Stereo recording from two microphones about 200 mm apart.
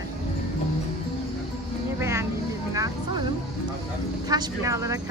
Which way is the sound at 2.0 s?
15° right (ahead or behind).